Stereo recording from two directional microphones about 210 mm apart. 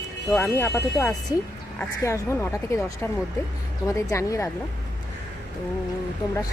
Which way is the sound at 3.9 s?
15° left (ahead or behind).